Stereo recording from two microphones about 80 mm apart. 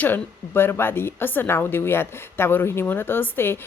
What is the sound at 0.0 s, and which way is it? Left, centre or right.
A woman's voice, left.